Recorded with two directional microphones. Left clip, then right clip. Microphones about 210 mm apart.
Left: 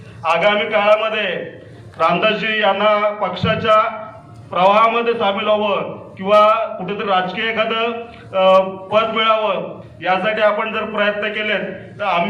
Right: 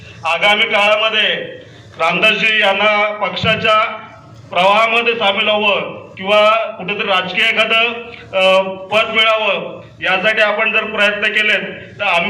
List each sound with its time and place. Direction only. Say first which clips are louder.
0.2 s a man's voice: right 2 dB; 50° left (ahead or behind)